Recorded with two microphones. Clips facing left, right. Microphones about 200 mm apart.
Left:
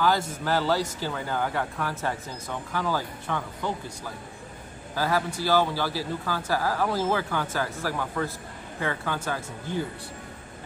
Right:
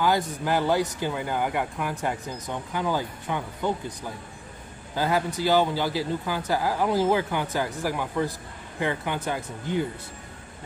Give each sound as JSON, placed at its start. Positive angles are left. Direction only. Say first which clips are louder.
{"t": 0.0, "sound": "speech", "louder": "right 1 dB", "side_deg": -15}